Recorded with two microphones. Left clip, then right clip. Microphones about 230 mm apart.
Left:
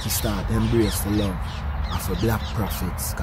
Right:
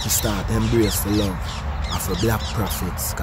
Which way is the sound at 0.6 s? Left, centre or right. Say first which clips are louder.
Right 2 dB; right.